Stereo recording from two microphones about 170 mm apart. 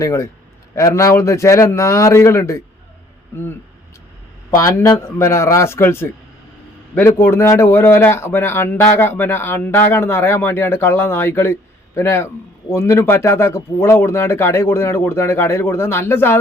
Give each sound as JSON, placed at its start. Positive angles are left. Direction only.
{"t": 0.0, "sound": "a man's voice", "side_deg": 20}
{"t": 4.5, "sound": "a man's voice", "side_deg": 20}